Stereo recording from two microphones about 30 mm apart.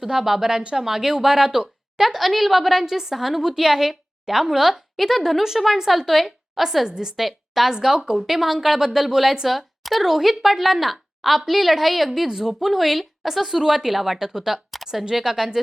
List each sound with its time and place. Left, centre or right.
0.1 s a woman's voice: centre
2.8 s a woman's voice: centre
6.8 s a woman's voice: right
7.2 s a woman's voice: centre
7.7 s a woman's voice: centre
8.3 s a woman's voice: centre
12.3 s a woman's voice: centre
12.5 s a woman's voice: centre